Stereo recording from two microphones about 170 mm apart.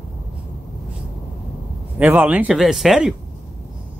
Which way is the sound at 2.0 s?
10° right (ahead or behind).